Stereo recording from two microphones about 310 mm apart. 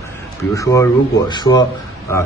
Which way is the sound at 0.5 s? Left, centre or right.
Centre.